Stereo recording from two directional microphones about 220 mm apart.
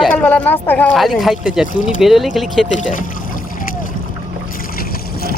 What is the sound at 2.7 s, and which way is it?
Speech, 35° left (ahead or behind).